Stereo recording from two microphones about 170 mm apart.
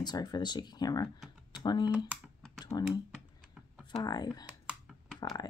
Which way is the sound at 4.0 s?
25° left (ahead or behind).